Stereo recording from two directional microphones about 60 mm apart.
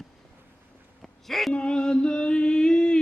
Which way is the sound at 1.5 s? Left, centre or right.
Centre.